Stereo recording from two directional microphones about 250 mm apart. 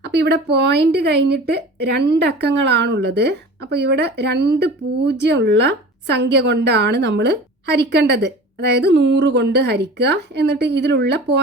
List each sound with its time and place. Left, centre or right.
0.0 s speech: right